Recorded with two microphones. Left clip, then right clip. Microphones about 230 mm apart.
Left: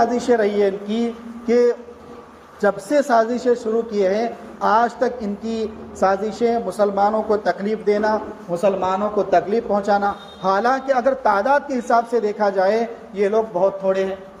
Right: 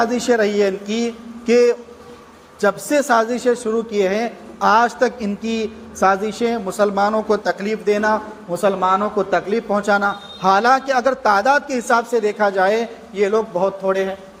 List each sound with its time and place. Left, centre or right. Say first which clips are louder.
0.0 s a man's voice: even; right